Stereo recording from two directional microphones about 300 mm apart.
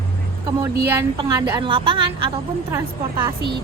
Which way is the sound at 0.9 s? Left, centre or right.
Centre.